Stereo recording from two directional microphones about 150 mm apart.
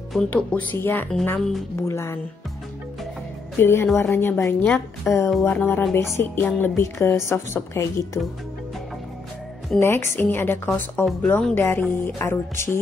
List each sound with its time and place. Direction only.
0.1 s a woman's voice: 5° left (ahead or behind)
3.5 s a woman's voice: 15° left (ahead or behind)
9.8 s a woman's voice: 15° left (ahead or behind)